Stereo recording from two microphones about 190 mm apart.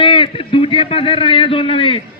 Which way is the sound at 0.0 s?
25° left (ahead or behind).